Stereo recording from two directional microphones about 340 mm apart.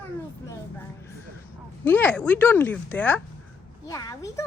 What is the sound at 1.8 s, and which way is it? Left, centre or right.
A woman's voice, centre.